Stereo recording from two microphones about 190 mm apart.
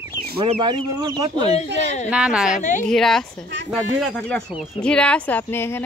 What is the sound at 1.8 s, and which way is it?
Speech, 35° left (ahead or behind).